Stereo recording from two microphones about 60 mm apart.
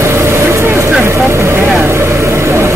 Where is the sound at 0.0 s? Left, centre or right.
Right.